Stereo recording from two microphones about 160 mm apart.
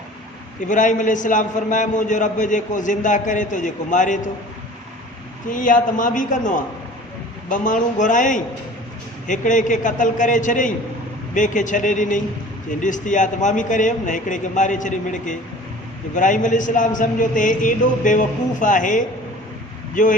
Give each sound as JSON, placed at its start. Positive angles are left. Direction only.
{"t": 0.6, "sound": "a man's voice", "side_deg": 55}
{"t": 5.5, "sound": "a man's voice", "side_deg": 55}